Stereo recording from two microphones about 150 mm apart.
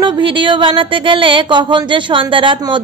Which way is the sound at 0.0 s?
35° right (ahead or behind).